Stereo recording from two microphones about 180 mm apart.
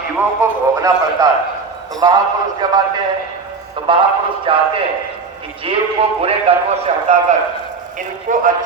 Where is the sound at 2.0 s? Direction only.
20° right (ahead or behind).